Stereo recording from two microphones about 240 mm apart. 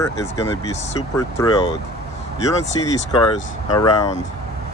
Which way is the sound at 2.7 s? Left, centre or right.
Centre.